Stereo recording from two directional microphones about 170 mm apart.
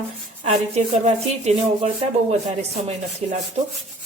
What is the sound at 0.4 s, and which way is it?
Speech, 40° right (ahead or behind).